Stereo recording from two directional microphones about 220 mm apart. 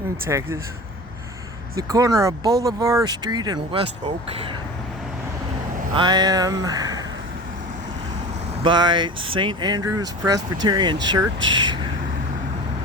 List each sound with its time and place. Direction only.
0.3 s speech: 10° right (ahead or behind)
1.7 s speech: 15° right (ahead or behind)
5.9 s speech: 20° right (ahead or behind)
8.6 s speech: 20° right (ahead or behind)